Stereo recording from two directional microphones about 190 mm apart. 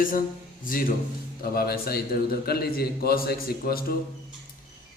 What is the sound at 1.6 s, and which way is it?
A man's voice, 55° left (ahead or behind).